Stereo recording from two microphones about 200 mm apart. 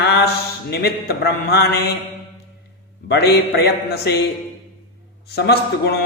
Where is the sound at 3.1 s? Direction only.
55° left (ahead or behind).